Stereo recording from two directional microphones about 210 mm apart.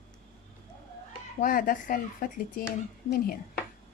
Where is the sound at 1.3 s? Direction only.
40° left (ahead or behind).